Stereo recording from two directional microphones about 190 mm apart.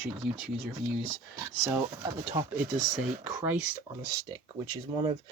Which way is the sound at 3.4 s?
10° right (ahead or behind).